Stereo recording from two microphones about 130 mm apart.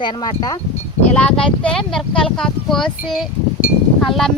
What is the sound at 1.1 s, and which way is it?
Speech, 10° left (ahead or behind).